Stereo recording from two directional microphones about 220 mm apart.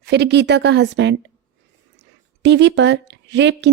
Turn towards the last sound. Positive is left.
turn(degrees=-55)  # may be behind; listen again after turning